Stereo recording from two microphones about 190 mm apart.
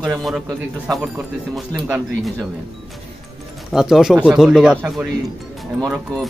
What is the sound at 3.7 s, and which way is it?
Speech, centre (ahead or behind).